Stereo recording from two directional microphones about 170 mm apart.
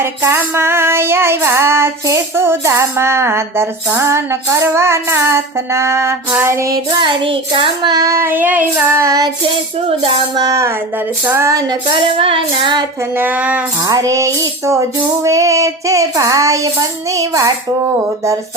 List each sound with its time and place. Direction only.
0.0 s female singing: 15° right (ahead or behind)
10.0 s music: 35° right (ahead or behind)
10.4 s female singing: 15° right (ahead or behind)
13.1 s female singing: 10° right (ahead or behind)
13.8 s female singing: 20° right (ahead or behind)